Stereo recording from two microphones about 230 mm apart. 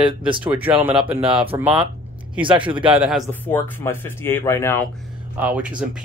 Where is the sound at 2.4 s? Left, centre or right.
Right.